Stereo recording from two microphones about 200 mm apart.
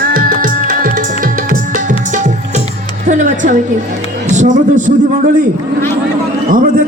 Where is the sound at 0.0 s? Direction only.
45° right (ahead or behind).